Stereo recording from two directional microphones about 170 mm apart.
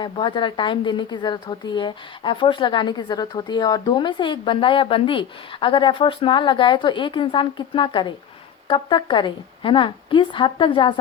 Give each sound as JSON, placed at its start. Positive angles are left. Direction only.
{"t": 0.0, "sound": "a woman's voice", "side_deg": 30}